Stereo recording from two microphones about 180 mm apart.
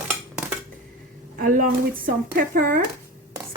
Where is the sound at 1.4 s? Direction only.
50° right (ahead or behind).